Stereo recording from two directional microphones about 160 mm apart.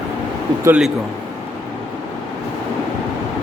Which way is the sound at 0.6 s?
5° right (ahead or behind).